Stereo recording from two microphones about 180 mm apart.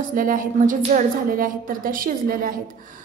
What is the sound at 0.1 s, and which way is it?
A woman's voice, 50° right (ahead or behind).